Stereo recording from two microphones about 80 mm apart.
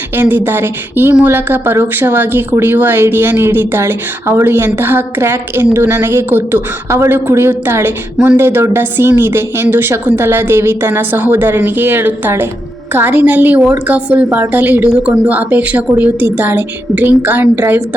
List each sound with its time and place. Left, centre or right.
0.2 s speech: right